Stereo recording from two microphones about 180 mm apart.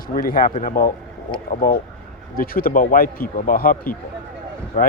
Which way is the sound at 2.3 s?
55° left (ahead or behind).